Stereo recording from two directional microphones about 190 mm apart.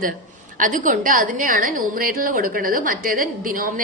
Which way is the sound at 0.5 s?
45° right (ahead or behind).